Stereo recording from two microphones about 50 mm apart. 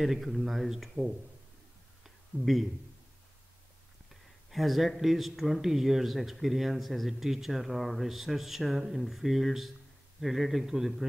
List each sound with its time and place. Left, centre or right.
0.0 s speech: centre
2.0 s a sound: centre
4.5 s speech: centre